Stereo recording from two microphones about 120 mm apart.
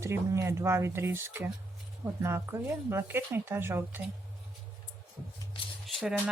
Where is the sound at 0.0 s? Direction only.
25° right (ahead or behind).